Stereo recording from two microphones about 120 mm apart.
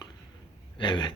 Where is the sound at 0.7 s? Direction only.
40° left (ahead or behind).